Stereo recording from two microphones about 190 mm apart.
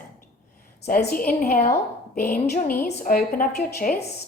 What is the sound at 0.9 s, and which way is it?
A woman's voice, 50° left (ahead or behind).